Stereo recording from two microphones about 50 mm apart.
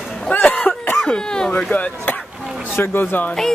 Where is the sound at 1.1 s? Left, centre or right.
Centre.